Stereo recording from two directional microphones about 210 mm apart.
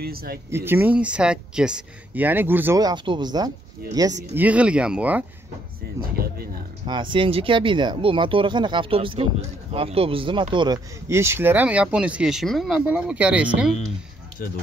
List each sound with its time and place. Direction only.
0.0 s speech: 45° right (ahead or behind)
0.5 s speech: 10° right (ahead or behind)
4.4 s speech: 5° right (ahead or behind)
5.9 s speech: 45° right (ahead or behind)
6.9 s speech: 25° right (ahead or behind); by 13.5 s 5° right (ahead or behind)